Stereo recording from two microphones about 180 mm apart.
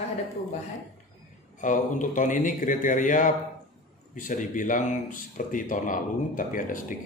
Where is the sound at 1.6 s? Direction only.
45° left (ahead or behind).